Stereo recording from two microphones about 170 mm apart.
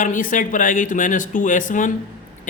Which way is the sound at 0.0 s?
50° left (ahead or behind).